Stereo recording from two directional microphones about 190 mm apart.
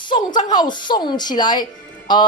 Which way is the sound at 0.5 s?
20° left (ahead or behind).